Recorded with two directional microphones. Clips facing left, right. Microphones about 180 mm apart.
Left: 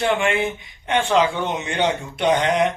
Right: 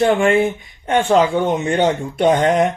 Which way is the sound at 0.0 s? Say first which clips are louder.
Right 6 dB; 45° right (ahead or behind).